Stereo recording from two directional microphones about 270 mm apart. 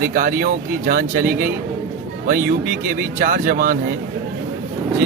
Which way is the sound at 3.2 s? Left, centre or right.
Right.